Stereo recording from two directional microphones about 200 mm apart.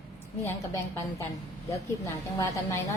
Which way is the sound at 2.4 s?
15° left (ahead or behind).